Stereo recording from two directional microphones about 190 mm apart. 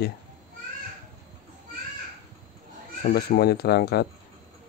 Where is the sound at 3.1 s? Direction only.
55° left (ahead or behind).